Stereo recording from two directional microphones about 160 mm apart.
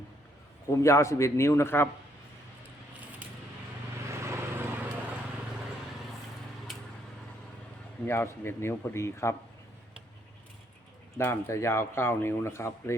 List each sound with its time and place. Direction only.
0.7 s speech: 20° left (ahead or behind)
4.1 s vehicle: 15° right (ahead or behind)
8.0 s speech: 15° left (ahead or behind)
11.2 s speech: 15° left (ahead or behind)